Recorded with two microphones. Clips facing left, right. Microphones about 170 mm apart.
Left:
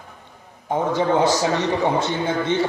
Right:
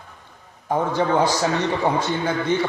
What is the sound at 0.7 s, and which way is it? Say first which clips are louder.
A man's voice: left 1 dB; 20° left (ahead or behind).